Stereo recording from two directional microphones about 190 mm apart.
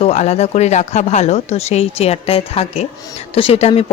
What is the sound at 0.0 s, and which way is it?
Speech, 35° left (ahead or behind).